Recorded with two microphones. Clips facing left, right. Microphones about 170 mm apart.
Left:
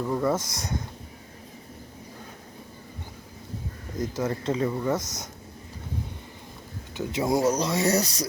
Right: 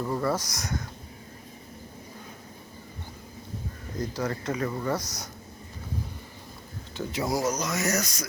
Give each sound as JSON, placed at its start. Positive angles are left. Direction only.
{"t": 0.0, "sound": "speech", "side_deg": 5}
{"t": 0.3, "sound": "speech", "side_deg": 25}
{"t": 4.0, "sound": "speech", "side_deg": 20}
{"t": 6.9, "sound": "speech", "side_deg": 25}